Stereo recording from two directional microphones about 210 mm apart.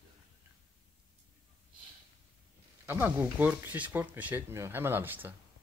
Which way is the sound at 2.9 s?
10° right (ahead or behind).